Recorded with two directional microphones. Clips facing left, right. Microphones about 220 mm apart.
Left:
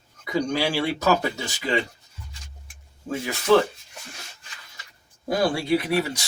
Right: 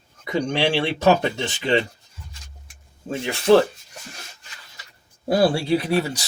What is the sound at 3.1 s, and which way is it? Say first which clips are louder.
Speech: right 3 dB; 30° right (ahead or behind).